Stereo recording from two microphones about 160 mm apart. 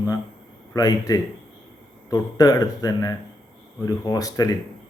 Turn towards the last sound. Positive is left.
turn(degrees=20)  # may be behind; listen again after turning